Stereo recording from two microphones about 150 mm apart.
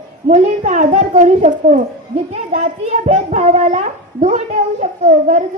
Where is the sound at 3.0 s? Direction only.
45° right (ahead or behind).